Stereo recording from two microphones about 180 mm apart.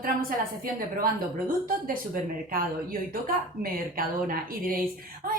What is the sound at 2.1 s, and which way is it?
Speech, 50° right (ahead or behind).